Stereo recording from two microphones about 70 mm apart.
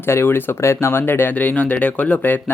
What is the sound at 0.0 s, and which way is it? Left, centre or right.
Speech, left.